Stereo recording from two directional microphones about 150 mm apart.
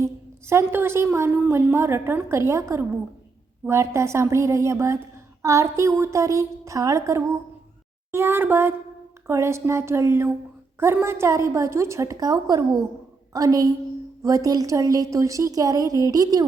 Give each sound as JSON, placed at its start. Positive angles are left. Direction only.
{"t": 0.0, "sound": "a woman's voice", "side_deg": -15}